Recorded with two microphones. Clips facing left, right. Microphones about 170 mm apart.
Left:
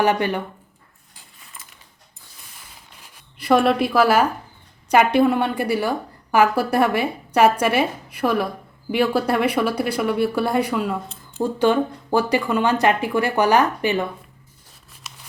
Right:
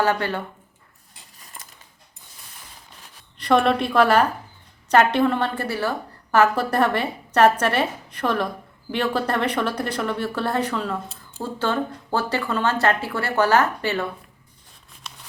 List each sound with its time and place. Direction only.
0.0 s speech: 15° left (ahead or behind)
1.6 s a sound: 40° right (ahead or behind)
3.3 s a woman's voice: 5° left (ahead or behind)